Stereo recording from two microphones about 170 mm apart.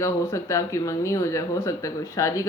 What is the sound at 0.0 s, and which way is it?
A woman's voice, 15° left (ahead or behind).